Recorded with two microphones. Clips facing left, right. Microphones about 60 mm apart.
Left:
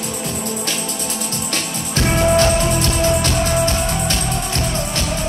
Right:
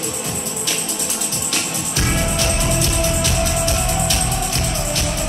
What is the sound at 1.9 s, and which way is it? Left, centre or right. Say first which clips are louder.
Music: left 7 dB; left.